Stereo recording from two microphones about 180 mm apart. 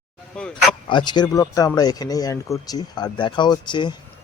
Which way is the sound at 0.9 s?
25° left (ahead or behind).